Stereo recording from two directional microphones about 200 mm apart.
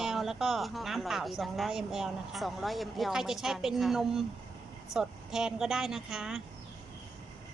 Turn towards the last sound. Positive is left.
turn(degrees=0)  # may be behind; listen again after turning